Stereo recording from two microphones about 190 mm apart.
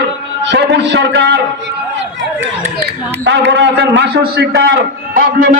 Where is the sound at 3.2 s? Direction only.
70° right (ahead or behind).